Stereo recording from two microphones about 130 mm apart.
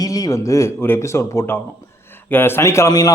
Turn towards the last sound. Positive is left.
turn(degrees=25)  # may be behind; listen again after turning